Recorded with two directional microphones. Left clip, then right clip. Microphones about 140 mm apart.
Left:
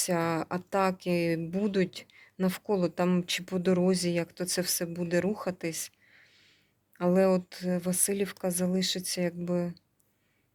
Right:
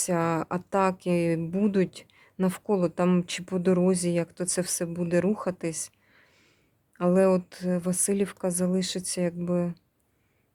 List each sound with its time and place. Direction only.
0.0 s speech: 20° right (ahead or behind)
6.9 s speech: 25° right (ahead or behind)